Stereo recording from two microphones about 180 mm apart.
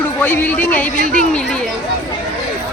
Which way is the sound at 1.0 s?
50° right (ahead or behind).